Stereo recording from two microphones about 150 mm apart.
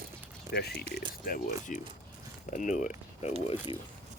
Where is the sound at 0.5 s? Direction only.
90° left.